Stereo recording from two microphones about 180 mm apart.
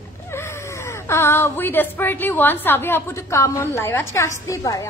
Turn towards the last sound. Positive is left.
turn(degrees=20)  # may be behind; listen again after turning